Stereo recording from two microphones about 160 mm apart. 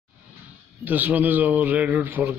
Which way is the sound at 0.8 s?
10° right (ahead or behind).